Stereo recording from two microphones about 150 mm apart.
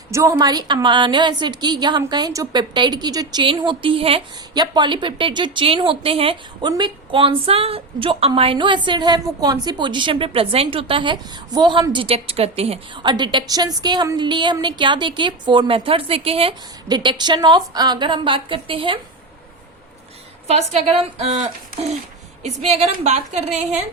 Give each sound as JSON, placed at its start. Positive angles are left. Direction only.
{"t": 0.1, "sound": "a woman's voice", "side_deg": -20}
{"t": 16.9, "sound": "a woman's voice", "side_deg": -30}
{"t": 20.5, "sound": "a woman's voice", "side_deg": -45}
{"t": 22.4, "sound": "a woman's voice", "side_deg": -50}